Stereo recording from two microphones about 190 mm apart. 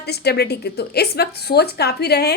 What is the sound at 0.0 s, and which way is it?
A woman's voice, 60° left (ahead or behind).